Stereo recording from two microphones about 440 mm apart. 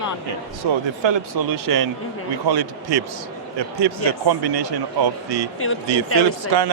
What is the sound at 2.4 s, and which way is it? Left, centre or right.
A man's voice, right.